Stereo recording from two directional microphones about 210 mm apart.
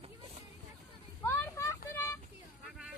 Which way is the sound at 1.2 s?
10° left (ahead or behind).